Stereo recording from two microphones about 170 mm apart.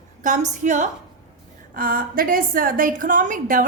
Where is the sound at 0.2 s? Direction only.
45° right (ahead or behind).